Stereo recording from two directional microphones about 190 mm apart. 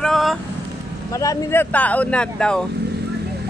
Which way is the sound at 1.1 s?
15° left (ahead or behind).